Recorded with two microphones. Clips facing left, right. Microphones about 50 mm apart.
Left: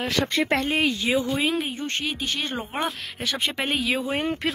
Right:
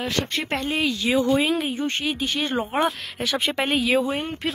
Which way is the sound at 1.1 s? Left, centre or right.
Centre.